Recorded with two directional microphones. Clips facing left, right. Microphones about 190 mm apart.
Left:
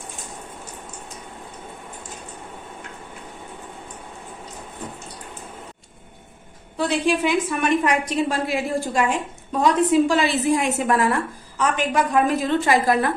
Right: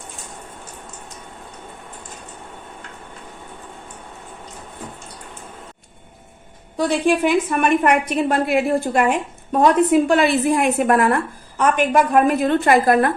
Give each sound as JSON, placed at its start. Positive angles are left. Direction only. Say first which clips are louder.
{"t": 6.7, "sound": "a woman's voice", "louder": "right 3 dB", "side_deg": -50}